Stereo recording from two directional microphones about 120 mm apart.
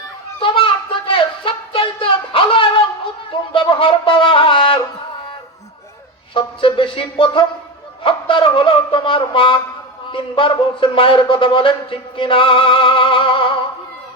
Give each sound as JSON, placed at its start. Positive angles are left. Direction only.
{"t": 0.4, "sound": "a sound", "side_deg": 45}
{"t": 3.5, "sound": "wind instrument", "side_deg": 50}
{"t": 6.3, "sound": "speech", "side_deg": 45}